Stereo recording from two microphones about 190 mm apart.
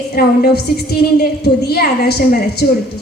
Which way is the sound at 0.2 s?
55° left (ahead or behind).